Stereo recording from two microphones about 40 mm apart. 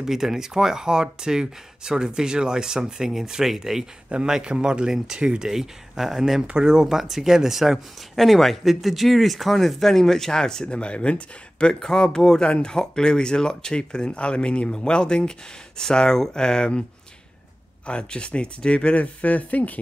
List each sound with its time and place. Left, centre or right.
0.0 s speech: centre
4.3 s speech: right
5.5 s speech: centre
6.4 s speech: centre
8.2 s speech: centre
10.7 s speech: left
11.8 s speech: centre
17.8 s speech: left